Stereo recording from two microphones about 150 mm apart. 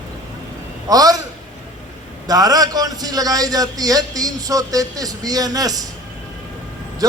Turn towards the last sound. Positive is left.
turn(degrees=-25)  # may be behind; listen again after turning